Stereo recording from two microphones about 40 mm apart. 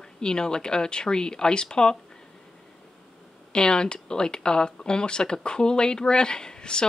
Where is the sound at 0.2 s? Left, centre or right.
Left.